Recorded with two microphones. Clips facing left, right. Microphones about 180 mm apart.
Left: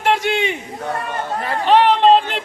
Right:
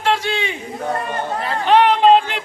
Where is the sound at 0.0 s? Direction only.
20° left (ahead or behind).